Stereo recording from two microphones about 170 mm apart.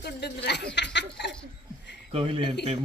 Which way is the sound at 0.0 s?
75° left (ahead or behind).